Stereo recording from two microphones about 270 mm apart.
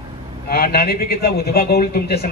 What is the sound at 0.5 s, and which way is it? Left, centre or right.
A man's voice, left.